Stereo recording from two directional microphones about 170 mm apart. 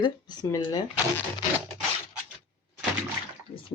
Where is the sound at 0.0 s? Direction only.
25° left (ahead or behind).